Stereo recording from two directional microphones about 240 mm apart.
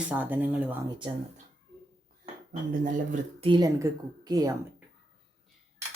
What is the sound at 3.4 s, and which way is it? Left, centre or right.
A woman's voice, centre.